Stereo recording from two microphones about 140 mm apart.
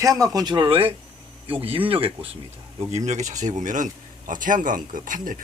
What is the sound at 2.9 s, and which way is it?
Speech, 55° right (ahead or behind).